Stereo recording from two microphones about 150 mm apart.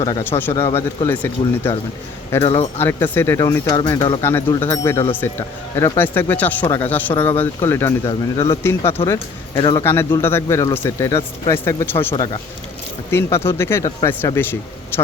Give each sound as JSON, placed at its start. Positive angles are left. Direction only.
{"t": 0.0, "sound": "speech", "side_deg": 20}
{"t": 2.5, "sound": "speech", "side_deg": 40}
{"t": 2.8, "sound": "speech", "side_deg": 15}
{"t": 4.2, "sound": "speech", "side_deg": 15}
{"t": 9.8, "sound": "speech", "side_deg": 15}
{"t": 12.1, "sound": "speech", "side_deg": 30}
{"t": 13.1, "sound": "speech", "side_deg": 15}